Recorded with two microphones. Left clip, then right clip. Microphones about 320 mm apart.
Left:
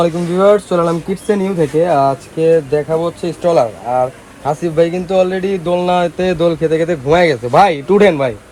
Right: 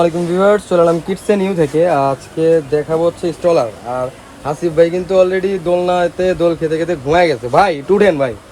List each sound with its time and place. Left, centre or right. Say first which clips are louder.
0.0 s speech: left 1 dB; centre